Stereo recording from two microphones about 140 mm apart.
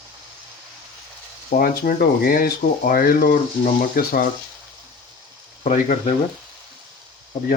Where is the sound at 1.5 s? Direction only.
90° left.